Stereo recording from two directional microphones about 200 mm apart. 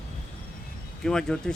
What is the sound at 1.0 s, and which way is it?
Speech, centre (ahead or behind).